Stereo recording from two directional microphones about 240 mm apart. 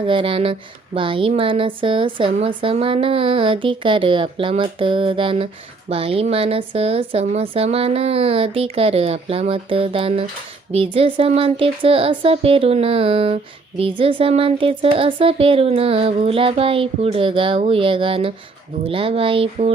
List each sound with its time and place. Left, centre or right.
0.0 s speech: right